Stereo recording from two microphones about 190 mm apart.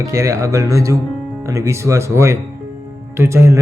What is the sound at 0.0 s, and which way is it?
Speech, 15° right (ahead or behind).